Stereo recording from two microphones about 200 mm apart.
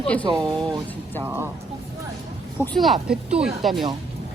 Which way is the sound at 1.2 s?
10° right (ahead or behind).